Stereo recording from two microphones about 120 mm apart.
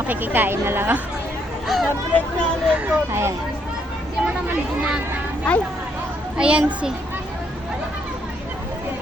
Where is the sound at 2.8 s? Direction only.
20° right (ahead or behind).